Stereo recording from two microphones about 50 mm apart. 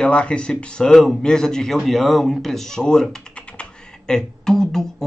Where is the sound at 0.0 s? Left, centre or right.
Left.